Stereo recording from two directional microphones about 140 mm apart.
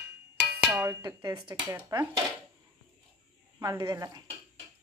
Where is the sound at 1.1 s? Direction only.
25° right (ahead or behind).